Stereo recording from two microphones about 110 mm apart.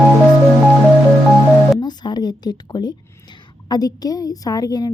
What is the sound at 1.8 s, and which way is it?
A woman's voice, 40° left (ahead or behind).